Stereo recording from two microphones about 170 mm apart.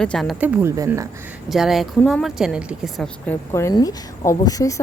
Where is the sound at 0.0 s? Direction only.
5° left (ahead or behind).